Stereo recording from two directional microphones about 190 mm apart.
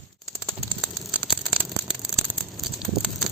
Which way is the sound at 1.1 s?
5° right (ahead or behind).